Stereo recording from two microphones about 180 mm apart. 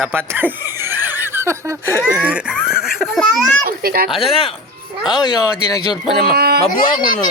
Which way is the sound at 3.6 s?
55° right (ahead or behind).